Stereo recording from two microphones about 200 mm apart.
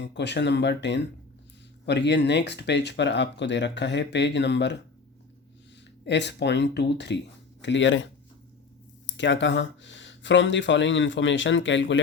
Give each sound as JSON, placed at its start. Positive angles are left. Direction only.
{"t": 0.0, "sound": "speech", "side_deg": 60}
{"t": 6.1, "sound": "speech", "side_deg": 60}
{"t": 9.0, "sound": "speech", "side_deg": 65}